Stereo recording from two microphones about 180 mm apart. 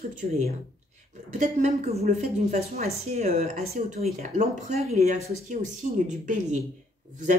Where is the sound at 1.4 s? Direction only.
40° right (ahead or behind).